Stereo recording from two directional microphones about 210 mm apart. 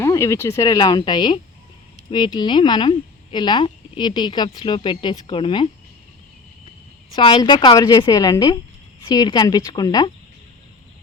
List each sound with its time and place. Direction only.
0.0 s speech: 15° left (ahead or behind)
7.2 s speech: 25° left (ahead or behind)